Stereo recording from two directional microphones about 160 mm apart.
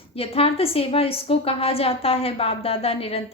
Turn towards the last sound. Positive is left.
turn(degrees=35)  # may be behind; listen again after turning